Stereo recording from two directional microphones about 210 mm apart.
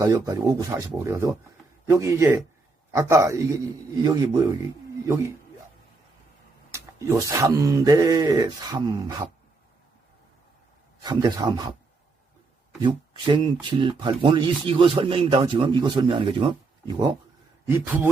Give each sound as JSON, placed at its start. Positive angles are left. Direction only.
{"t": 0.0, "sound": "speech", "side_deg": -15}
{"t": 6.7, "sound": "speech", "side_deg": -15}
{"t": 11.0, "sound": "speech", "side_deg": -20}
{"t": 12.8, "sound": "speech", "side_deg": -20}
{"t": 17.7, "sound": "speech", "side_deg": -10}